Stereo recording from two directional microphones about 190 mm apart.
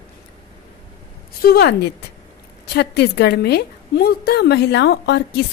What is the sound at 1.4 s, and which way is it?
A woman's voice, 55° left (ahead or behind).